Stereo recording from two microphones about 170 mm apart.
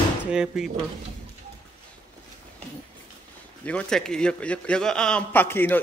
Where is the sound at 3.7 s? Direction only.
5° left (ahead or behind).